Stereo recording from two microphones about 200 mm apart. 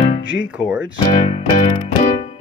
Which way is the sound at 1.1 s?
35° left (ahead or behind).